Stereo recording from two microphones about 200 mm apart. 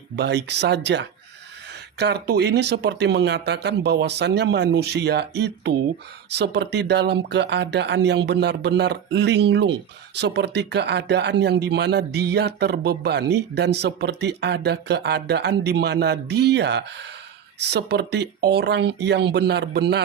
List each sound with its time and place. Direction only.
0.2 s speech: 55° right (ahead or behind)